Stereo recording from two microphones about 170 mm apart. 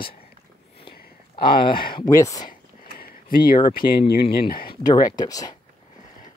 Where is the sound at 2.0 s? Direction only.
15° left (ahead or behind).